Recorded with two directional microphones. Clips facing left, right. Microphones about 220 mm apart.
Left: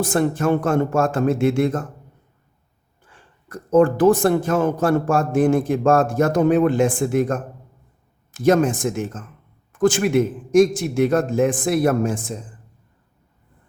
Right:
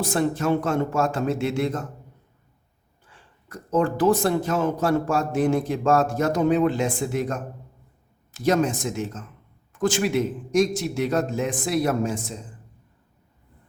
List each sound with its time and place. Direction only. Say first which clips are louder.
0.0 s a man's voice: left 4 dB; 50° left (ahead or behind)
3.1 s a man's voice: left 5 dB; 50° left (ahead or behind)